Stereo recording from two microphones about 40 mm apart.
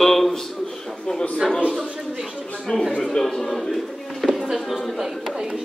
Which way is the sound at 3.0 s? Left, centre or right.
Centre.